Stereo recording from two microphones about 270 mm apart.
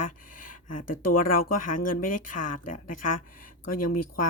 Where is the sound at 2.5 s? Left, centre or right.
Left.